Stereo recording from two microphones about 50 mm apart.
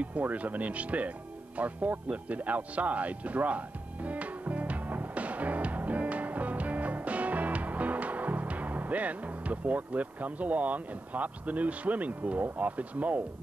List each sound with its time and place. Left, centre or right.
0.0 s speech: right
1.6 s music: right